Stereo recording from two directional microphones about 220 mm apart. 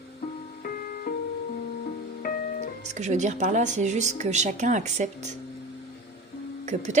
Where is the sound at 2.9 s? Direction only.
35° right (ahead or behind).